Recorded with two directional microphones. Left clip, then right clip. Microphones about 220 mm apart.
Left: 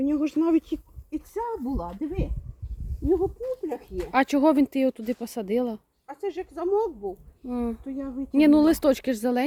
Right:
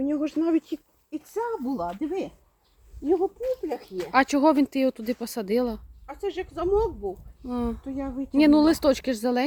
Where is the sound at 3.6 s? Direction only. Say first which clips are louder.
Right 1 dB; 5° left (ahead or behind).